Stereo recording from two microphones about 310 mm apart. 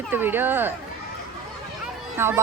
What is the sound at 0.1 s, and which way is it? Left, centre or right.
Speech, centre.